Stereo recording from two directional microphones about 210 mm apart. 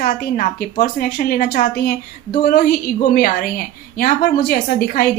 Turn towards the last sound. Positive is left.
turn(degrees=45)  # may be behind; listen again after turning